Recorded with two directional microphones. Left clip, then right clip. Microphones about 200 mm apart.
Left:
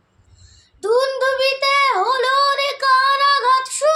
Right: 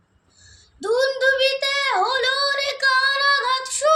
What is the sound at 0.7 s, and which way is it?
Child singing, 10° left (ahead or behind).